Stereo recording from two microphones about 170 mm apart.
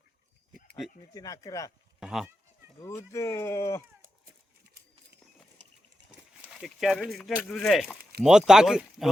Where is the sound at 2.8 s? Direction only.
15° left (ahead or behind).